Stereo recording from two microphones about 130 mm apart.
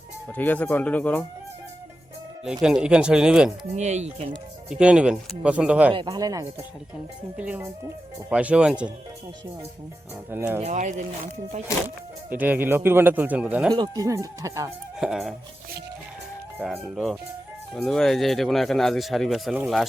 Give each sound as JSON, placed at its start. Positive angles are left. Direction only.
{"t": 0.3, "sound": "speech", "side_deg": 10}
{"t": 2.4, "sound": "a man's voice", "side_deg": -5}
{"t": 3.8, "sound": "speech", "side_deg": -60}
{"t": 4.7, "sound": "a man's voice", "side_deg": -5}
{"t": 5.9, "sound": "speech", "side_deg": -35}
{"t": 7.3, "sound": "a man's voice", "side_deg": -10}
{"t": 10.2, "sound": "a man's voice", "side_deg": -15}
{"t": 10.6, "sound": "speech", "side_deg": -65}
{"t": 12.3, "sound": "a man's voice", "side_deg": -15}
{"t": 13.7, "sound": "speech", "side_deg": -30}
{"t": 14.9, "sound": "music", "side_deg": -5}
{"t": 16.6, "sound": "speech", "side_deg": 0}